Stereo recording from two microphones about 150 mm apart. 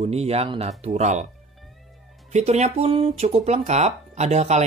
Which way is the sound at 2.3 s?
45° right (ahead or behind).